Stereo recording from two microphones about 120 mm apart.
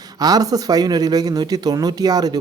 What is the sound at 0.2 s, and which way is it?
Speech, 35° right (ahead or behind).